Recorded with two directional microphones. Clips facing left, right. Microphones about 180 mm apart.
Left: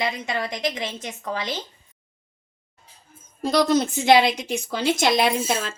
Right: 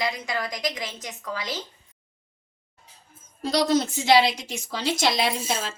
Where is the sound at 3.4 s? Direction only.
50° left (ahead or behind).